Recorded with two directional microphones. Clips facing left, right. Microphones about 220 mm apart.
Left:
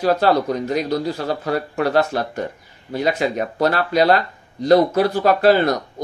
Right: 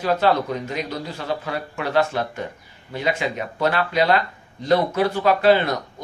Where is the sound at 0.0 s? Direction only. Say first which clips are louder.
Left 3 dB; 40° left (ahead or behind).